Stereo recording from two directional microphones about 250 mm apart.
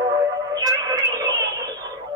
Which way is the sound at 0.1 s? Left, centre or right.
Centre.